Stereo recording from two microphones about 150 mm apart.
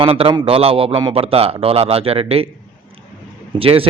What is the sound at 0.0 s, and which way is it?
Speech, 40° right (ahead or behind).